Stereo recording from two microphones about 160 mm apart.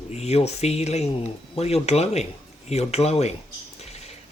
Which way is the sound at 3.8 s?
40° left (ahead or behind).